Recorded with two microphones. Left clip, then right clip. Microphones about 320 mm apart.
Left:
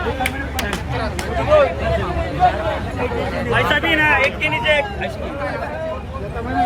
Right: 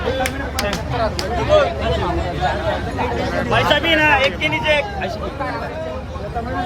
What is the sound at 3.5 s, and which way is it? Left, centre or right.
Speech, right.